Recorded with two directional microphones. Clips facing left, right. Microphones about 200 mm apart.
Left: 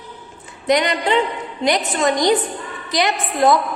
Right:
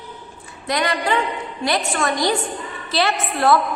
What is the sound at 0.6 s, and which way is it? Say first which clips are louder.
A woman's voice: left 4 dB; 20° left (ahead or behind).